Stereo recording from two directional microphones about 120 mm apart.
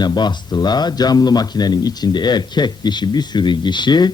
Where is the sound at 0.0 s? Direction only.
35° left (ahead or behind).